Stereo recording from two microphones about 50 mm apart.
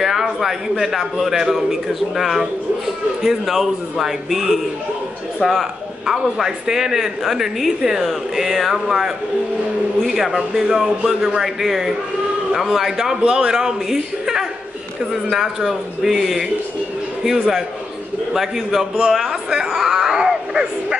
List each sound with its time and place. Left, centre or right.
0.0 s a man's voice: centre
10.3 s a man's voice: centre
19.8 s a sound: centre